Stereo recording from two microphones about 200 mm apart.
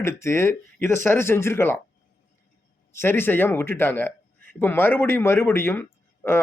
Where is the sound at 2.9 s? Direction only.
10° left (ahead or behind).